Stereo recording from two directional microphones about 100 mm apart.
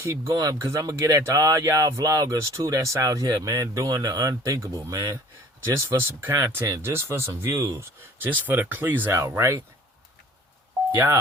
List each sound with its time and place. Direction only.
0.0 s speech: 25° right (ahead or behind)
8.2 s speech: 20° right (ahead or behind)
9.2 s speech: 30° right (ahead or behind)
10.9 s speech: 25° right (ahead or behind)